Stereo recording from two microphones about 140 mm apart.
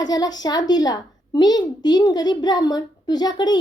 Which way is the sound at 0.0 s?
30° left (ahead or behind).